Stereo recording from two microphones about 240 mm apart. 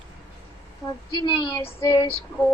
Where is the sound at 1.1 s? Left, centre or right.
Centre.